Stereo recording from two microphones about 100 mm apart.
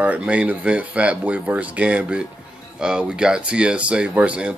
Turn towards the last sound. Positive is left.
turn(degrees=-10)  # may be behind; listen again after turning